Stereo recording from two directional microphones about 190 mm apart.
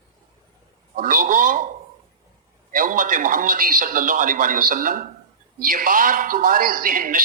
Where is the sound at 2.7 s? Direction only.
45° right (ahead or behind).